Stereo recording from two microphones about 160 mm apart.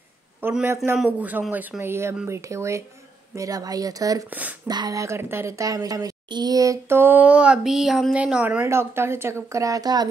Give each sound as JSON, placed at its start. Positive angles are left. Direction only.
{"t": 0.4, "sound": "a woman's voice", "side_deg": -15}
{"t": 4.3, "sound": "a woman's voice", "side_deg": -10}
{"t": 4.6, "sound": "a woman's voice", "side_deg": -25}